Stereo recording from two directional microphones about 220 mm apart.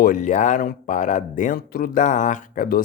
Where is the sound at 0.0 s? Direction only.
35° left (ahead or behind).